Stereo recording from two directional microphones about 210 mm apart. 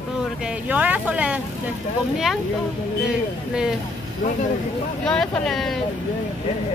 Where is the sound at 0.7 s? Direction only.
5° right (ahead or behind).